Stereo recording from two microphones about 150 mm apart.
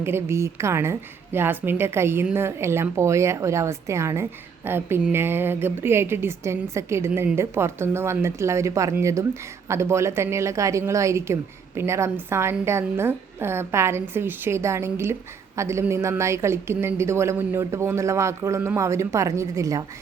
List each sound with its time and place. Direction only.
0.0 s a woman's voice: 15° right (ahead or behind)